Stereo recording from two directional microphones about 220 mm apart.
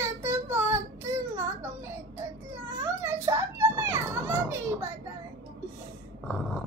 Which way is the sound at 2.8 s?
15° right (ahead or behind).